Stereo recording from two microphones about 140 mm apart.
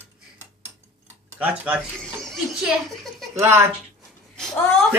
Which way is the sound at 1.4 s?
10° right (ahead or behind).